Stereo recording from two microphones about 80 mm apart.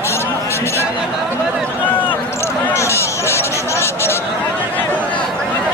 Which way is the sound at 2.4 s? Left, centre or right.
Left.